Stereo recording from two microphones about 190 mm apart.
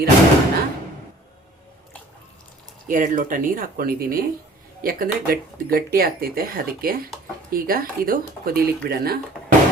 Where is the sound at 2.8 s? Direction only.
45° right (ahead or behind).